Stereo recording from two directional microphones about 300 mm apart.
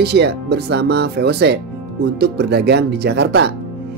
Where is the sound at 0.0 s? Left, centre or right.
Right.